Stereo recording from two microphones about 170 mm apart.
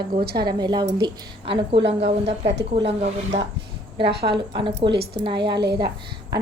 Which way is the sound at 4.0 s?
75° right (ahead or behind).